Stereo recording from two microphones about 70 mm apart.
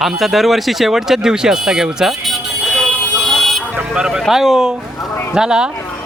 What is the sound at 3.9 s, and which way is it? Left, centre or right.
Speech, centre.